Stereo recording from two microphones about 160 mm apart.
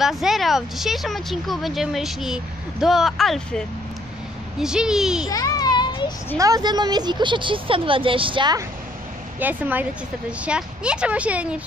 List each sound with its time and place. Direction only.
0.0 s speech: centre (ahead or behind)
5.3 s a sound: 25° left (ahead or behind)
6.3 s speech: 20° right (ahead or behind)
9.4 s speech: 10° right (ahead or behind)